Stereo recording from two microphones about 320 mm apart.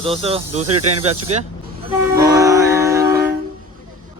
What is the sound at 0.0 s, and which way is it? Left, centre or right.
Speech, centre.